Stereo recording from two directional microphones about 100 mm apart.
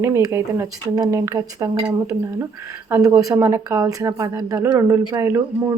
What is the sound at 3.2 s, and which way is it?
A man's voice, 35° right (ahead or behind).